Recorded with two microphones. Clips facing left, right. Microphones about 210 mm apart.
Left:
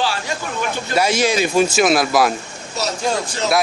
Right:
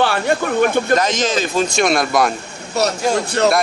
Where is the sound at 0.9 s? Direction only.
10° left (ahead or behind).